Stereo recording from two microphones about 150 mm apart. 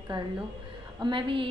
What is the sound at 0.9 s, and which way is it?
Speech, 30° right (ahead or behind).